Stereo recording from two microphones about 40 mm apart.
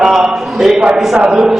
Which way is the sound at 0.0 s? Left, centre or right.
Centre.